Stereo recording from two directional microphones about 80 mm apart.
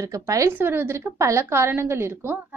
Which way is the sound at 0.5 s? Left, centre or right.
Right.